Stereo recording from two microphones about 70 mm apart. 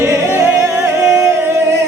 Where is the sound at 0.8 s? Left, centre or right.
Right.